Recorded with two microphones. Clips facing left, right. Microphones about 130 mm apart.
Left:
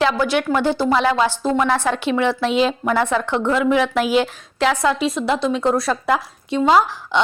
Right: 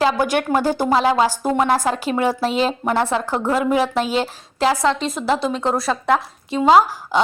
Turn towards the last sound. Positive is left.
turn(degrees=-5)  # may be behind; listen again after turning